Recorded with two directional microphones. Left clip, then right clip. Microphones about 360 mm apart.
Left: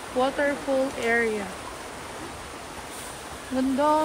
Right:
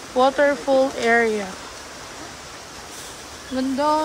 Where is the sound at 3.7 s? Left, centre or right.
Centre.